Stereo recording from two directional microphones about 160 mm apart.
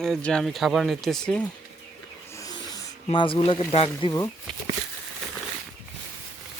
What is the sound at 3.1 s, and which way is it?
Speech, 35° left (ahead or behind).